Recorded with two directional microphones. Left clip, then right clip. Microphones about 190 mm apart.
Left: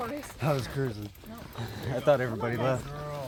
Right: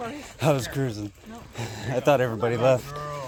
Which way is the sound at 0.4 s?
65° right (ahead or behind).